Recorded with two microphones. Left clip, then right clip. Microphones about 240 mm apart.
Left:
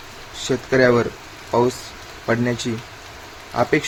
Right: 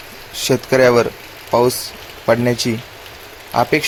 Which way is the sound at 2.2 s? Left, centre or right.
Centre.